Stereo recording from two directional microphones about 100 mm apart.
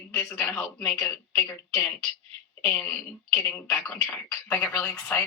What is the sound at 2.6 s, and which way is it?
Speech, 15° left (ahead or behind).